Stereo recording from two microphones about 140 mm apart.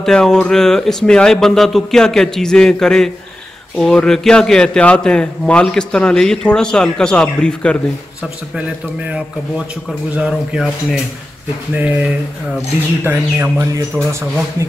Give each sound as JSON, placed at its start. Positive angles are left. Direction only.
{"t": 0.0, "sound": "a man's voice", "side_deg": 5}
{"t": 8.2, "sound": "a man's voice", "side_deg": -5}
{"t": 13.0, "sound": "a man's voice", "side_deg": -15}